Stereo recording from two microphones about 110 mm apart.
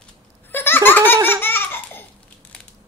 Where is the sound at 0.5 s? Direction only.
20° left (ahead or behind).